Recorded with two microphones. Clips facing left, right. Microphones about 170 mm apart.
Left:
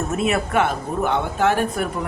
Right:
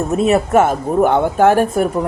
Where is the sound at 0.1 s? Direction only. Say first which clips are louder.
Right 9 dB; 35° right (ahead or behind).